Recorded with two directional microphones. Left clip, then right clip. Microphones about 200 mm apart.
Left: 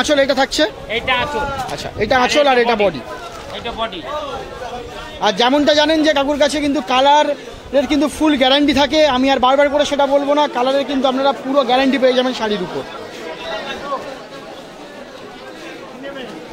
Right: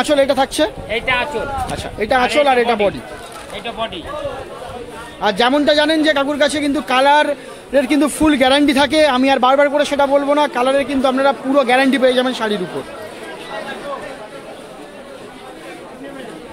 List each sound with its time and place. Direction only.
0.0 s a man's voice: centre (ahead or behind)
0.8 s speech: 20° right (ahead or behind)
2.0 s a man's voice: 5° left (ahead or behind)
5.2 s a man's voice: 5° right (ahead or behind)